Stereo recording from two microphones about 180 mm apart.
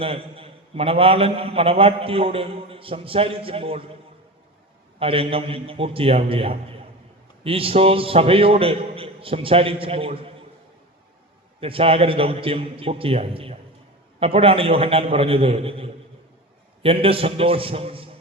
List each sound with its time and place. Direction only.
0.0 s a man's voice: 30° right (ahead or behind)
4.9 s a man's voice: 30° right (ahead or behind)
11.6 s a man's voice: 30° right (ahead or behind)